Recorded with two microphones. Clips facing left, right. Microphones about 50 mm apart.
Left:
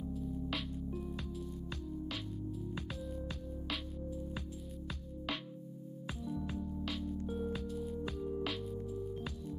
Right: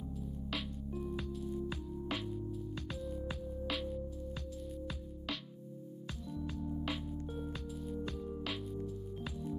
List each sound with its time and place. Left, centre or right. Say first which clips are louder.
0.0 s music: left 4 dB; centre
2.9 s music: right 2 dB; centre
6.2 s music: left 2 dB; centre
6.8 s music: even; centre
7.2 s music: left 4 dB; centre